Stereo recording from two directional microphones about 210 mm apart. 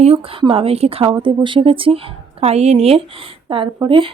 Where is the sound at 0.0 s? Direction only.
25° right (ahead or behind).